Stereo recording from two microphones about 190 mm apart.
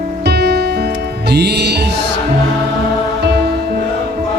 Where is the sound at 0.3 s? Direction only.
60° right (ahead or behind).